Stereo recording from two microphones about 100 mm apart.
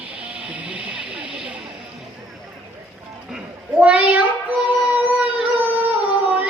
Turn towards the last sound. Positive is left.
turn(degrees=-15)  # may be behind; listen again after turning